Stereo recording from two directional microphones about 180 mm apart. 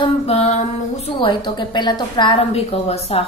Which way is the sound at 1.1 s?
25° left (ahead or behind).